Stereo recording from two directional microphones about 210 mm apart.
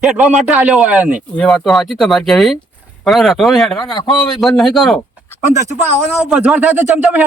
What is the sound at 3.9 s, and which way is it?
Speech, 20° left (ahead or behind).